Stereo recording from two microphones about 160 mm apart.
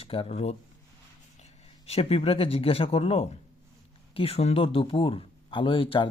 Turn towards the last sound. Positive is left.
turn(degrees=30)  # may be behind; listen again after turning